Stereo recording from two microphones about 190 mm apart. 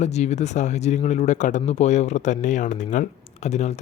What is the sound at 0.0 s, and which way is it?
Speech, 35° left (ahead or behind).